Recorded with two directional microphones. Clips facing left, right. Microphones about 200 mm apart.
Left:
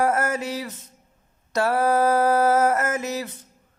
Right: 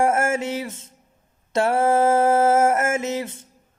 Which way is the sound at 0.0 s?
25° right (ahead or behind).